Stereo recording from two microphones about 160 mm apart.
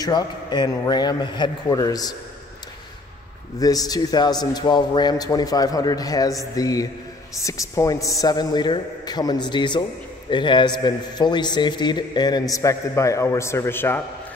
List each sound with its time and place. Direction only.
0.0 s a man's voice: 25° left (ahead or behind)
3.5 s a man's voice: 25° left (ahead or behind)